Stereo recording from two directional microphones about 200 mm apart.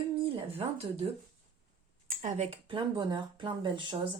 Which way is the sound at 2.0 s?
35° right (ahead or behind).